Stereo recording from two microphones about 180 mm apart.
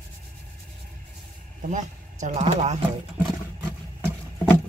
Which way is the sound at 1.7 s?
40° right (ahead or behind).